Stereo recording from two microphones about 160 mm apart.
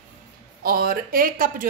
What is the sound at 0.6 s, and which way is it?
Speech, 65° right (ahead or behind).